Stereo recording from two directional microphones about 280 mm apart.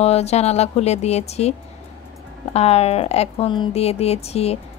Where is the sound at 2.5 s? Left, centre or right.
Left.